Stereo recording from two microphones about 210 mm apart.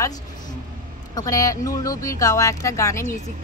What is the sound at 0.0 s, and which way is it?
Vehicle, 15° left (ahead or behind).